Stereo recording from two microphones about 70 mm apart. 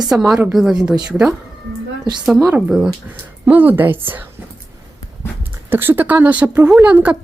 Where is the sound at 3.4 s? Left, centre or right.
Right.